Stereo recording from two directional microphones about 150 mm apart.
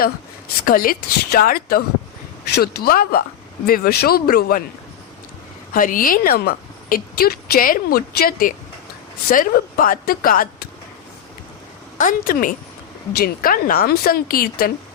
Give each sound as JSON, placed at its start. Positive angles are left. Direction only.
{"t": 0.6, "sound": "speech", "side_deg": 70}
{"t": 5.7, "sound": "speech", "side_deg": 65}
{"t": 11.9, "sound": "speech", "side_deg": 65}
{"t": 13.1, "sound": "speech", "side_deg": 80}